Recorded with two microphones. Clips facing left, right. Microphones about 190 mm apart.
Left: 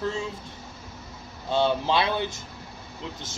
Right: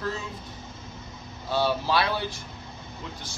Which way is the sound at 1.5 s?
20° left (ahead or behind).